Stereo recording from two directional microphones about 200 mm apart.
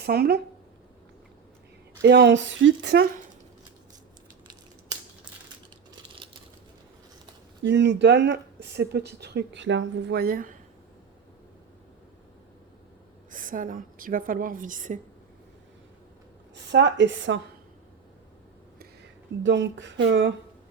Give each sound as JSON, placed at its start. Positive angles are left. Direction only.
{"t": 0.0, "sound": "a woman's voice", "side_deg": -50}
{"t": 2.0, "sound": "speech", "side_deg": -60}
{"t": 6.2, "sound": "crushing", "side_deg": -25}
{"t": 7.6, "sound": "speech", "side_deg": -60}
{"t": 13.3, "sound": "a woman's voice", "side_deg": -40}
{"t": 16.7, "sound": "speech", "side_deg": -60}
{"t": 19.4, "sound": "speech", "side_deg": -65}